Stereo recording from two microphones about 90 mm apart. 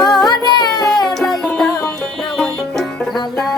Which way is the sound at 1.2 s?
Centre (ahead or behind).